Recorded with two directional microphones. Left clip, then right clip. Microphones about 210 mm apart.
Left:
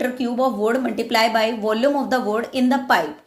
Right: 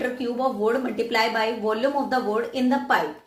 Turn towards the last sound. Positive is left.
turn(degrees=50)  # may be behind; listen again after turning